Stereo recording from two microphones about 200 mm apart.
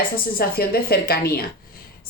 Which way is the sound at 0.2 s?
50° left (ahead or behind).